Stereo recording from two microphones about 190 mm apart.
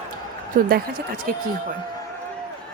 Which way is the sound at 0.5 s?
45° right (ahead or behind).